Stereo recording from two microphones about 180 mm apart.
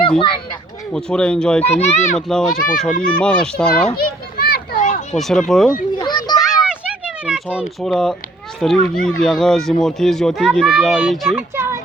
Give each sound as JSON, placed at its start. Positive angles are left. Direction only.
{"t": 0.2, "sound": "speech", "side_deg": 30}
{"t": 0.9, "sound": "a child's voice", "side_deg": 5}
{"t": 1.6, "sound": "a child's voice", "side_deg": 35}
{"t": 2.1, "sound": "a child's voice", "side_deg": 5}
{"t": 3.9, "sound": "children playing", "side_deg": 60}
{"t": 5.1, "sound": "a child's voice", "side_deg": 0}
{"t": 6.0, "sound": "children playing", "side_deg": 25}
{"t": 6.4, "sound": "a sound", "side_deg": 0}
{"t": 7.3, "sound": "a child's voice", "side_deg": -5}
{"t": 11.3, "sound": "music", "side_deg": -15}